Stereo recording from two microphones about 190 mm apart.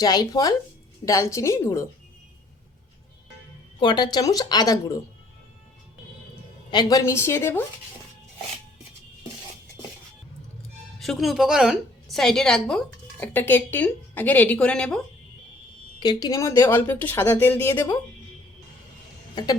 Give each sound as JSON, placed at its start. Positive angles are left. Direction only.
{"t": 0.0, "sound": "speech", "side_deg": 20}
{"t": 3.8, "sound": "speech", "side_deg": 25}
{"t": 6.7, "sound": "speech", "side_deg": 20}
{"t": 11.0, "sound": "speech", "side_deg": 0}
{"t": 16.0, "sound": "speech", "side_deg": 20}